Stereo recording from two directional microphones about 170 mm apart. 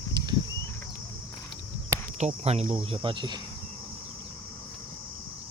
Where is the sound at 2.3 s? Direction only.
35° right (ahead or behind).